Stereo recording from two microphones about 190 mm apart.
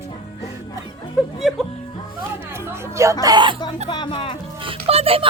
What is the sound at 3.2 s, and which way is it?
Speech, 25° right (ahead or behind).